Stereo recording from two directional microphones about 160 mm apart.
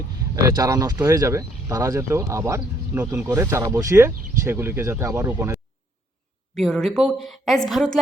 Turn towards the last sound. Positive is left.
turn(degrees=5)  # may be behind; listen again after turning